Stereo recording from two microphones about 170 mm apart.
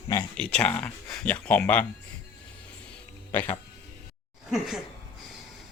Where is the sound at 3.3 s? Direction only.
10° left (ahead or behind).